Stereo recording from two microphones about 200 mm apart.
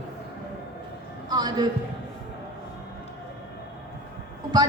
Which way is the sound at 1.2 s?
20° right (ahead or behind).